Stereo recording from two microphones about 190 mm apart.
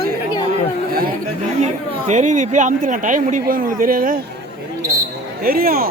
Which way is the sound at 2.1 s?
40° right (ahead or behind).